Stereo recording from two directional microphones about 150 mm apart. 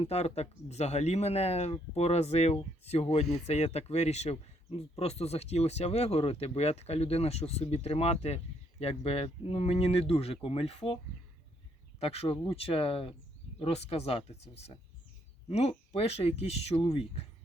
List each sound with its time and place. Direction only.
0.0 s speech: 45° left (ahead or behind)
11.9 s speech: 40° left (ahead or behind)